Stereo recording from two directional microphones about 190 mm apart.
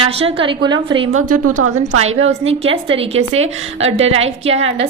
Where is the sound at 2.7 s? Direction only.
30° right (ahead or behind).